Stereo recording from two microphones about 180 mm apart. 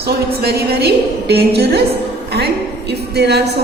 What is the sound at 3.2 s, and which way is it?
Speech, 65° right (ahead or behind).